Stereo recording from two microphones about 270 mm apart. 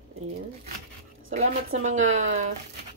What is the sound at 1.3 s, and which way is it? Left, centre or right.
Speech, right.